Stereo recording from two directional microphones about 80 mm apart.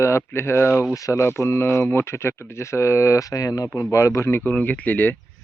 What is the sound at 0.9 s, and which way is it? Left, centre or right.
Speech, left.